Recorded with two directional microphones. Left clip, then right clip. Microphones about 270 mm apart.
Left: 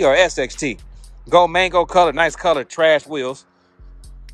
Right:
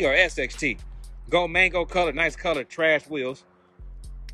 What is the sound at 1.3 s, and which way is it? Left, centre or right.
Speech, centre.